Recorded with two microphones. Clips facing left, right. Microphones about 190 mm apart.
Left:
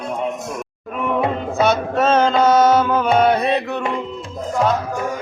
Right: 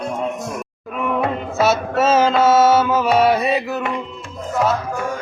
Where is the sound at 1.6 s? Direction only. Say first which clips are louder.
Even; 5° right (ahead or behind).